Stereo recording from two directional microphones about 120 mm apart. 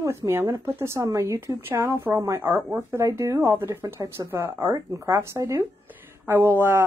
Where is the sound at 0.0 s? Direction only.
25° right (ahead or behind).